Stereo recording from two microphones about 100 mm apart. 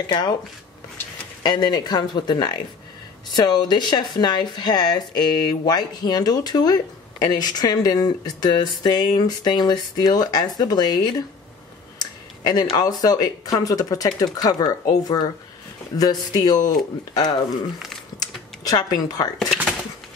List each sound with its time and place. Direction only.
0.0 s speech: 45° left (ahead or behind)
1.4 s speech: 45° left (ahead or behind)
12.0 s a sound: 45° left (ahead or behind)
12.7 s speech: 40° left (ahead or behind)
18.6 s speech: 40° left (ahead or behind)
19.3 s speech: 10° left (ahead or behind)